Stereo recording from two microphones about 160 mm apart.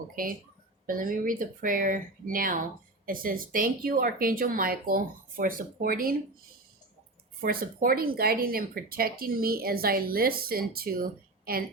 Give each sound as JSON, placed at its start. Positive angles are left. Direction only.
{"t": 0.2, "sound": "speech", "side_deg": -60}
{"t": 7.4, "sound": "speech", "side_deg": -65}